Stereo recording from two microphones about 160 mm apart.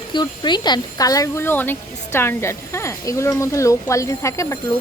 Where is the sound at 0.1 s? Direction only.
30° left (ahead or behind).